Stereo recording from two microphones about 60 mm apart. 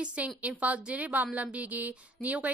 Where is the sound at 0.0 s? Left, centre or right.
Right.